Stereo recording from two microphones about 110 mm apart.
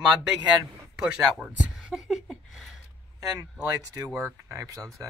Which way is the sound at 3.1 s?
35° right (ahead or behind).